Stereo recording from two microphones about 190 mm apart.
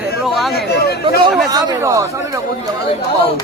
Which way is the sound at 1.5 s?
15° right (ahead or behind).